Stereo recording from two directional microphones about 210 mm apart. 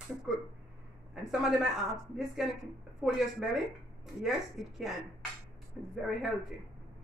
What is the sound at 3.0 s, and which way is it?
A man's voice, centre (ahead or behind).